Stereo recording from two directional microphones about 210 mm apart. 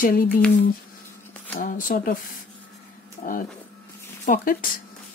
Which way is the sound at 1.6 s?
40° left (ahead or behind).